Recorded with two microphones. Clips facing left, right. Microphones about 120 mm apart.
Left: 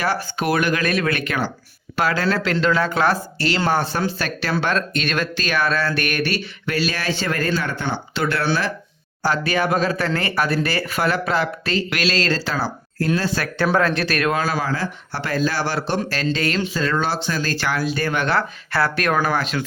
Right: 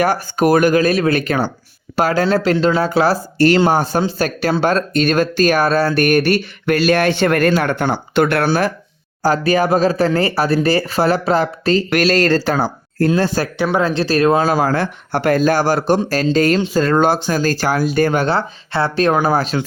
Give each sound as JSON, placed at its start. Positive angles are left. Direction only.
{"t": 0.0, "sound": "speech", "side_deg": -45}
{"t": 3.3, "sound": "speech", "side_deg": -50}
{"t": 13.7, "sound": "speech", "side_deg": -25}